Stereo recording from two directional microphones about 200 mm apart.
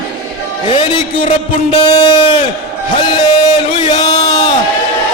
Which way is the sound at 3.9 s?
20° left (ahead or behind).